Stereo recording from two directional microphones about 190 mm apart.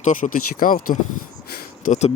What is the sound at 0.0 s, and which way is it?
Speech, 45° left (ahead or behind).